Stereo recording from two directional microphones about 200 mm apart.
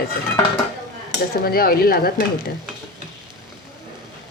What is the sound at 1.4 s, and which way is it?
Speech, 50° left (ahead or behind).